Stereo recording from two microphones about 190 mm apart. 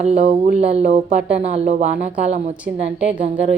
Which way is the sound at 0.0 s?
35° right (ahead or behind).